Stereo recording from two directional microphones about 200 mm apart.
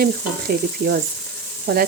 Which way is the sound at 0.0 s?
50° right (ahead or behind).